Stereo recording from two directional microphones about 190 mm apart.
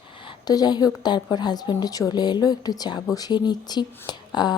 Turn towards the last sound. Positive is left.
turn(degrees=20)  # may be behind; listen again after turning